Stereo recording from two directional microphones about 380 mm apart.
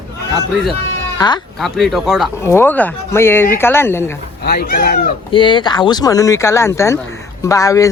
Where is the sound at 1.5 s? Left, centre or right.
Centre.